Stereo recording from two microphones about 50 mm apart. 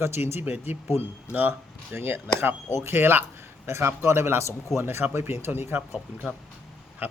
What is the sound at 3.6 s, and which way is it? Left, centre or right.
Speech, right.